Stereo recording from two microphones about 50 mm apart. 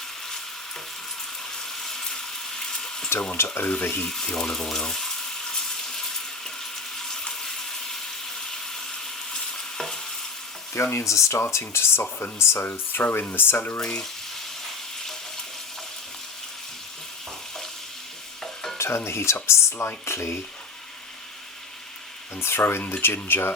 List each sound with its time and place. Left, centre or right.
1.5 s frying: centre
3.3 s speech: left
3.8 s speech: left
4.0 s frying: centre
6.9 s water: centre
9.3 s stir: centre
10.9 s speech: left
11.5 s speech: left
12.6 s speech: left
18.8 s speech: left
22.4 s speech: left